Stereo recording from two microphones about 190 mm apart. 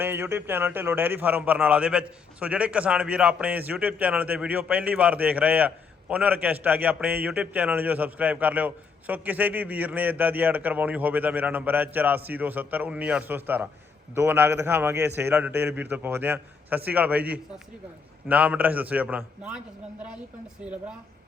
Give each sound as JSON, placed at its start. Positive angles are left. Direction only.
{"t": 0.0, "sound": "a man's voice", "side_deg": -10}